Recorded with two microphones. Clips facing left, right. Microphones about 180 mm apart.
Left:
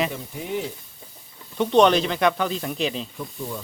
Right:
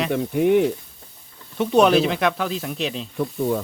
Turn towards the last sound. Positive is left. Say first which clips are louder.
# right 10 dB
turn(degrees=-60)  # may be behind; listen again after turning